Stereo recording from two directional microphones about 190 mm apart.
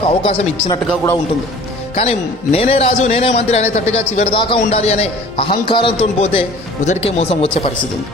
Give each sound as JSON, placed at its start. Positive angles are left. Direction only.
{"t": 0.1, "sound": "speech", "side_deg": 30}
{"t": 2.0, "sound": "a man's voice", "side_deg": 30}